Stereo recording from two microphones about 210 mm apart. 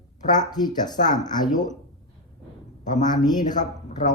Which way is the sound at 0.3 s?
20° left (ahead or behind).